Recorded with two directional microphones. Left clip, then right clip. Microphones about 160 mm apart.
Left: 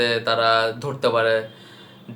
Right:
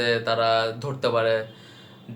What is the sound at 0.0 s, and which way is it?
Speech, 10° left (ahead or behind).